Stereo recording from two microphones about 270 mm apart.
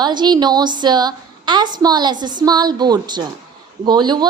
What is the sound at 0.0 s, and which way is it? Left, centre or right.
A woman's voice, centre.